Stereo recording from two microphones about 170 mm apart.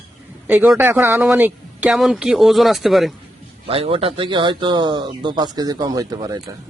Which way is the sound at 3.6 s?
35° right (ahead or behind).